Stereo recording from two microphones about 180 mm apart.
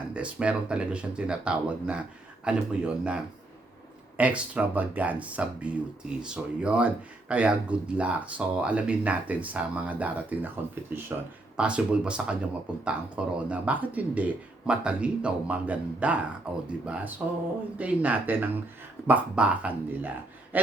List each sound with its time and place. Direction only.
0.1 s speech: 5° right (ahead or behind)
4.2 s speech: 10° right (ahead or behind)